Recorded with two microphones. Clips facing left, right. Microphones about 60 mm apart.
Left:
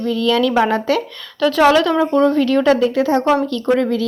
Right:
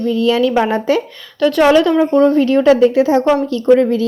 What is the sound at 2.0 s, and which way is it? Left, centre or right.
A woman's voice, centre.